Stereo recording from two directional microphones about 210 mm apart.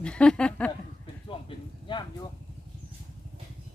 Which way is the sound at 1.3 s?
25° left (ahead or behind).